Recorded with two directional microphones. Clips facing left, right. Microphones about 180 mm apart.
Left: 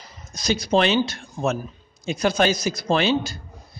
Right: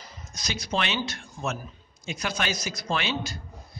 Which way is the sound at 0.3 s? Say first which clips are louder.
Left 10 dB; 30° left (ahead or behind).